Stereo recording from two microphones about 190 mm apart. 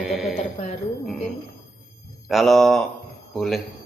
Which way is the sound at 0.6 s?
35° left (ahead or behind).